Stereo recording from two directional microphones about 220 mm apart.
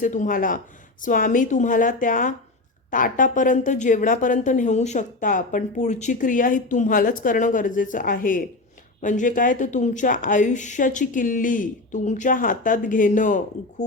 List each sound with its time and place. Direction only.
0.0 s a woman's voice: 35° left (ahead or behind)